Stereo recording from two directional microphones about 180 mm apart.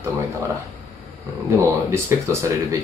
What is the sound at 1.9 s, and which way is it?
Speech, 15° right (ahead or behind).